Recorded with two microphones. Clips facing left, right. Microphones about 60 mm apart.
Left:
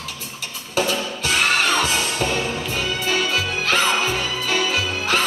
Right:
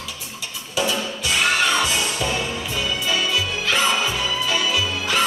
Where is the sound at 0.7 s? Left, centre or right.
Left.